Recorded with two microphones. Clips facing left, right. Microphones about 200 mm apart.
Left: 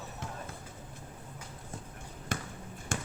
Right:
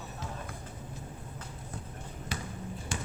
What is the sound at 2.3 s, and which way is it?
Basketball bounce, 50° left (ahead or behind).